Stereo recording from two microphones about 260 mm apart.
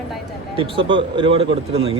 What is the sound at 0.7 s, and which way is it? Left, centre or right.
Speech, centre.